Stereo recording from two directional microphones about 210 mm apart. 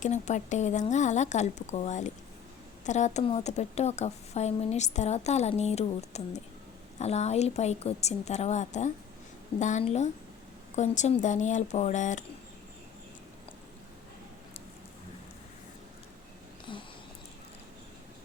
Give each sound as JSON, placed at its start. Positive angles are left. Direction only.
{"t": 0.0, "sound": "a woman's voice", "side_deg": 35}